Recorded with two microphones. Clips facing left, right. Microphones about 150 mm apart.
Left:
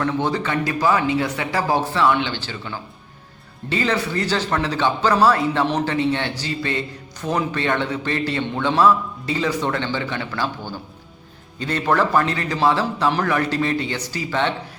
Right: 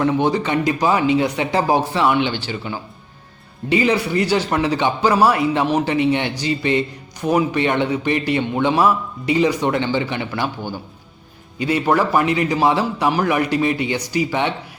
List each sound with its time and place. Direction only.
0.0 s a man's voice: 15° right (ahead or behind)